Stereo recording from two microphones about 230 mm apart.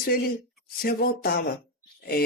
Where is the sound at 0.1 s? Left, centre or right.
Left.